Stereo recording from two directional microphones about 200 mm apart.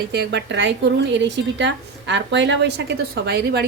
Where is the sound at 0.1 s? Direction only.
60° right (ahead or behind).